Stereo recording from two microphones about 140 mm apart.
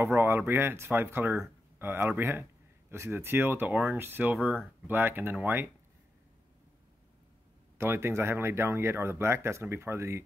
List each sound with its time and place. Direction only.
0.0 s a sound: 15° right (ahead or behind)
0.5 s speech: 15° right (ahead or behind)
7.7 s speech: 15° right (ahead or behind)